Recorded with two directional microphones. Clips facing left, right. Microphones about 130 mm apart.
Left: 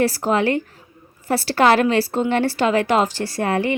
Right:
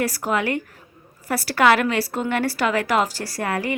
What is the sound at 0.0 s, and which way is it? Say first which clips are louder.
A woman's voice: left 4 dB; 30° left (ahead or behind).